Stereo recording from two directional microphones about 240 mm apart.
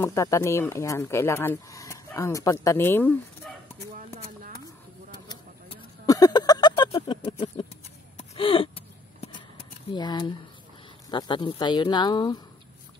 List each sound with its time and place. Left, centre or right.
0.0 s speech: centre
3.4 s bow-wow: centre
5.3 s a sound: centre
8.2 s gasp: left
9.8 s speech: centre